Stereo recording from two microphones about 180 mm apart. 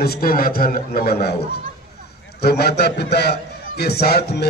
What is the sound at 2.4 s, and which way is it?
A man's voice, 60° left (ahead or behind).